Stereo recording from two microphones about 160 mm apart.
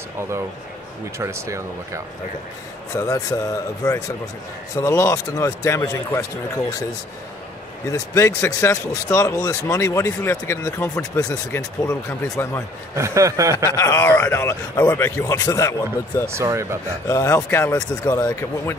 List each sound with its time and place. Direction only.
1.1 s speech: 20° right (ahead or behind)
2.9 s speech: 20° left (ahead or behind)
7.9 s speech: 20° left (ahead or behind)
12.9 s speech: 20° right (ahead or behind)
13.7 s speech: 15° left (ahead or behind)
16.3 s speech: 15° right (ahead or behind)
17.1 s speech: 20° left (ahead or behind)